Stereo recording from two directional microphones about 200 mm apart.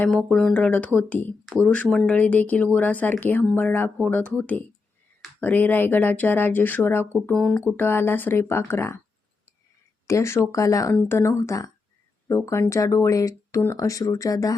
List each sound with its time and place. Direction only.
0.0 s speech: centre (ahead or behind)
10.1 s speech: 15° left (ahead or behind)